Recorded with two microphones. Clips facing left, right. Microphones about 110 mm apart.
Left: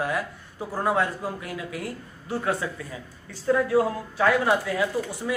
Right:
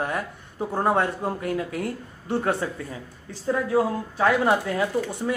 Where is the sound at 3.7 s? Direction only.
30° right (ahead or behind).